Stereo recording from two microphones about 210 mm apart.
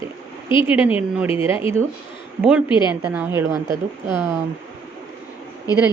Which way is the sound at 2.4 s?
5° right (ahead or behind).